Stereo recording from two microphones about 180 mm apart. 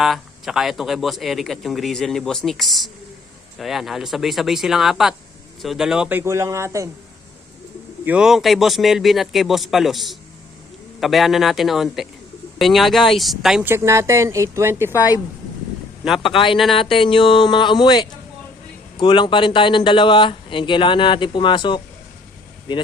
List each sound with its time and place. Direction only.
0.0 s speech: centre (ahead or behind)
8.0 s speech: 5° right (ahead or behind)
16.2 s speech: 30° left (ahead or behind)